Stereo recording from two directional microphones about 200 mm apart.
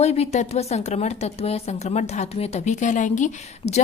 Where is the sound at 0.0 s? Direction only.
30° left (ahead or behind).